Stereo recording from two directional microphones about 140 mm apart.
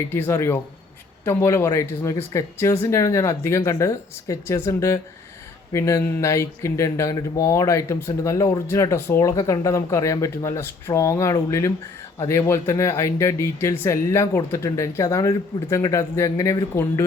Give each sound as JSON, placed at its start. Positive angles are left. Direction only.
{"t": 0.1, "sound": "speech", "side_deg": 15}